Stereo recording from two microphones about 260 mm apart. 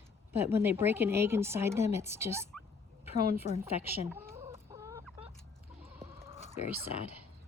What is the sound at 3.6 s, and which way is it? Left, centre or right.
Chicken, centre.